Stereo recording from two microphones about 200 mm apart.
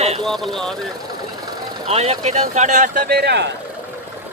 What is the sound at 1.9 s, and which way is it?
Speech, 30° right (ahead or behind).